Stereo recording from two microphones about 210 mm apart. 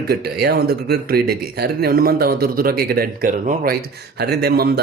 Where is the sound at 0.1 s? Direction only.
50° right (ahead or behind).